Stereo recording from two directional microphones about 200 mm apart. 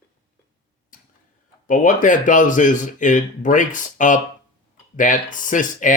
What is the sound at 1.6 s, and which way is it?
Speech, 40° left (ahead or behind).